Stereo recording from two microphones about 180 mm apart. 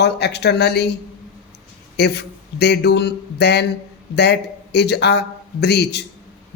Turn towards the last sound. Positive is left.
turn(degrees=70)  # may be behind; listen again after turning